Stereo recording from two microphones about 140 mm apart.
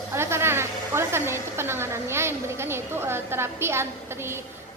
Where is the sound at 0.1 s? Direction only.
20° right (ahead or behind).